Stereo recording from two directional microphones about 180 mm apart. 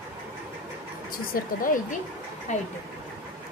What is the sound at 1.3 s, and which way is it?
A woman's voice, 50° left (ahead or behind).